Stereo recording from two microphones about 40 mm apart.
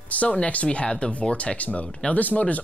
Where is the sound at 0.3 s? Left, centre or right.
Left.